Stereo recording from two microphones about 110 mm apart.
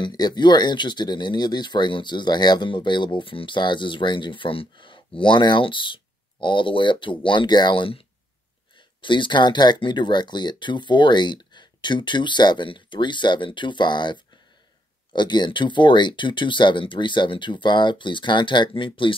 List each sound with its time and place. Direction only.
0.0 s speech: 40° left (ahead or behind)